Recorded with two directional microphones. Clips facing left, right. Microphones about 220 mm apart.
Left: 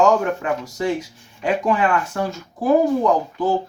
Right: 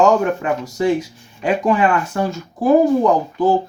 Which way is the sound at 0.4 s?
10° right (ahead or behind).